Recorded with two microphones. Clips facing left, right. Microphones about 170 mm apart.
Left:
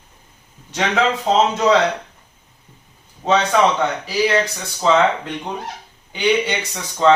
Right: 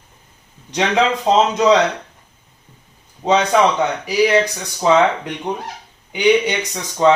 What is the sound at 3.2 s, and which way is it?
A man's voice, 20° right (ahead or behind).